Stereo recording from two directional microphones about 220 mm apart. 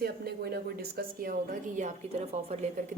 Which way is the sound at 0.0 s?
45° right (ahead or behind).